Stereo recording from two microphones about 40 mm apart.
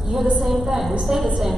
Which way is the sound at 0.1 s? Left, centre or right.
Centre.